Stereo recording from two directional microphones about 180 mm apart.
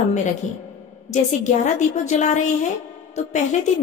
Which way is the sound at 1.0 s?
40° left (ahead or behind).